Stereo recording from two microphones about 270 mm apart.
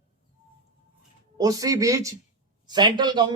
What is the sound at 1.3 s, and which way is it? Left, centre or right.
A man's voice, centre.